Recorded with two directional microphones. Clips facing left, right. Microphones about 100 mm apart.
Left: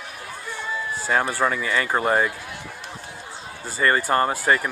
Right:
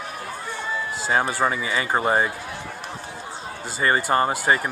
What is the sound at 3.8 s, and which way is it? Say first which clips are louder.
Speech: even; 10° right (ahead or behind).